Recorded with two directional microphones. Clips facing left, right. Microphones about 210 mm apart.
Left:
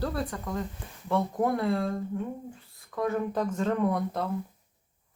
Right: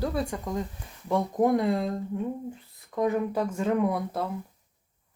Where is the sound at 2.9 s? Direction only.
15° right (ahead or behind).